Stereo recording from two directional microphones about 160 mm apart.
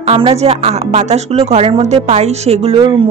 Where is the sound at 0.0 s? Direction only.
40° right (ahead or behind).